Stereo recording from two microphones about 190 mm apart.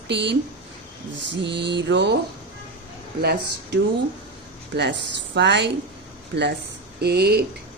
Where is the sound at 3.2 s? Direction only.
60° right (ahead or behind).